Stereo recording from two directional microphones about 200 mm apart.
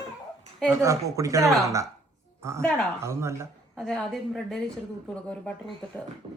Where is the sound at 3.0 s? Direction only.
15° right (ahead or behind).